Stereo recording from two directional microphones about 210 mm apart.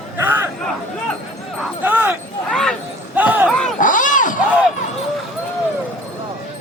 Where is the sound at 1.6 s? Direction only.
10° right (ahead or behind).